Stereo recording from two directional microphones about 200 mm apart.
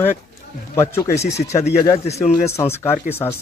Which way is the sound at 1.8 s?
30° left (ahead or behind).